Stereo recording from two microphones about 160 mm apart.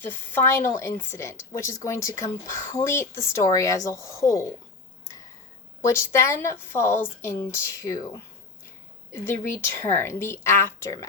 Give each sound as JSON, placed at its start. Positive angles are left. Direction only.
{"t": 0.0, "sound": "speech", "side_deg": 15}
{"t": 5.8, "sound": "speech", "side_deg": 15}